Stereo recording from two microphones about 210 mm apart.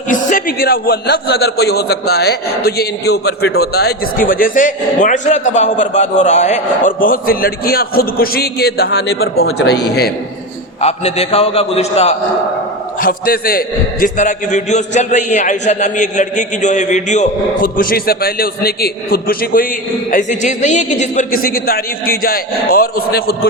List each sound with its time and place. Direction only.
0.1 s a man's voice: 40° left (ahead or behind)
10.8 s a man's voice: 30° left (ahead or behind)
13.0 s a man's voice: 45° left (ahead or behind)